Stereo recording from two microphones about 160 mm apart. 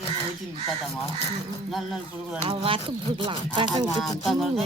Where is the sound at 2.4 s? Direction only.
35° right (ahead or behind).